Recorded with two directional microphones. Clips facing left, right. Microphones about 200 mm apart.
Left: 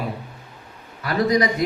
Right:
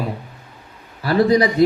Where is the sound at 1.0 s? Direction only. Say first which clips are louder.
Right 5 dB; 30° right (ahead or behind).